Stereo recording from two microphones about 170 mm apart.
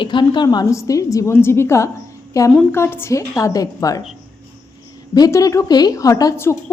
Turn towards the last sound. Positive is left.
turn(degrees=20)  # may be behind; listen again after turning